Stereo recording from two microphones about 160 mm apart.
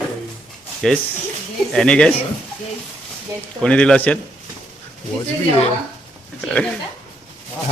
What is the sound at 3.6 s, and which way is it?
Speech, 5° left (ahead or behind).